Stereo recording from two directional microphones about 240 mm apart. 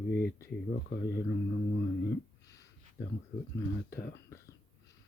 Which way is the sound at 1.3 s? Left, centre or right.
Left.